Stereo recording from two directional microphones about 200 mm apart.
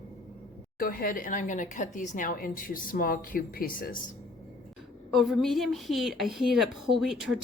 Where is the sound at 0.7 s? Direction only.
45° left (ahead or behind).